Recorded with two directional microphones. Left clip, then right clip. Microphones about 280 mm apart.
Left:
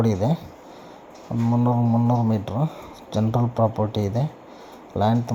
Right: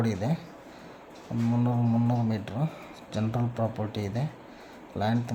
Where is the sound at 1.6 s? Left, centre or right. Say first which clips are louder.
Left 8 dB; centre.